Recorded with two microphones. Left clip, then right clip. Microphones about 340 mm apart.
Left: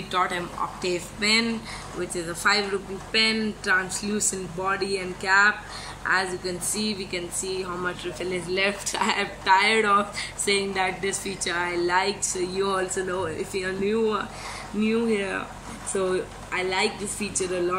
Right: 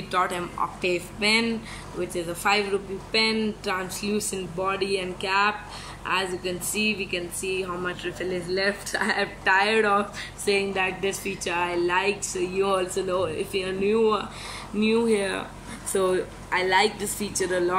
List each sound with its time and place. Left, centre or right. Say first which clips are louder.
0.1 s speech: even; centre